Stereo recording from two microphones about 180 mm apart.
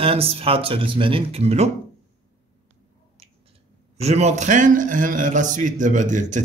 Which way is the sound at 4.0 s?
35° right (ahead or behind).